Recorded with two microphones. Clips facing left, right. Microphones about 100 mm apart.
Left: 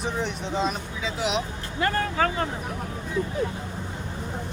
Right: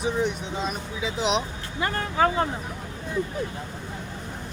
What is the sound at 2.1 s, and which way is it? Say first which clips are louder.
Speech: right 3 dB; 20° right (ahead or behind).